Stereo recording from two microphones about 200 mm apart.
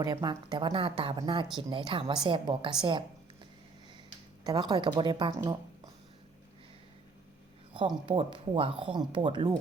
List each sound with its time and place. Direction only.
0.0 s speech: 20° right (ahead or behind)
4.4 s speech: 20° right (ahead or behind)
7.7 s speech: 25° right (ahead or behind)